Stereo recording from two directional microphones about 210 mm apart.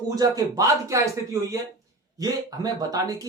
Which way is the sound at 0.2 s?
15° right (ahead or behind).